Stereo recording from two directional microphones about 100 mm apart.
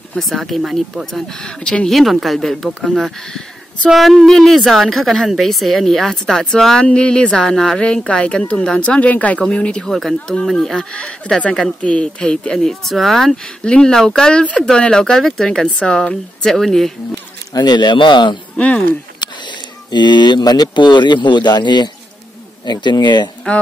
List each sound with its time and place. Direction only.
0.1 s a woman's voice: centre (ahead or behind)
17.6 s speech: 45° left (ahead or behind)
18.6 s speech: 15° left (ahead or behind)
19.9 s speech: 50° left (ahead or behind)